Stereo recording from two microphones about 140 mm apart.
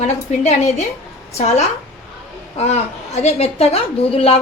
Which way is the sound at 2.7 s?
50° left (ahead or behind).